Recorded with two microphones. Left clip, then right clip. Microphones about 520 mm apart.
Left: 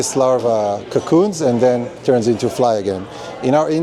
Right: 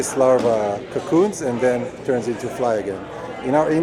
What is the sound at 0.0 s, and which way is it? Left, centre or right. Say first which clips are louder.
A man's voice: left 1 dB; left.